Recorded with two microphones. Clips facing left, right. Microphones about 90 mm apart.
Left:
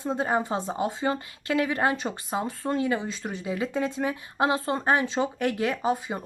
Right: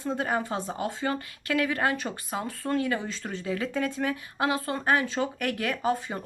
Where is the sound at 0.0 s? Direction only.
20° left (ahead or behind).